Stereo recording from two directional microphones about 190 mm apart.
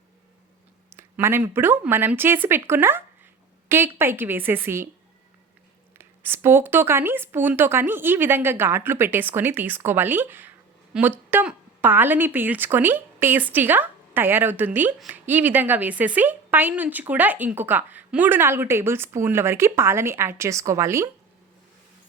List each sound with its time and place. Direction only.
0.9 s speech: 15° right (ahead or behind)
6.0 s speech: 10° right (ahead or behind)